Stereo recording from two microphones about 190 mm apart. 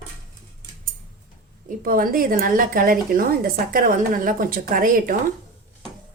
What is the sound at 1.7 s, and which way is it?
A woman's voice, 50° right (ahead or behind).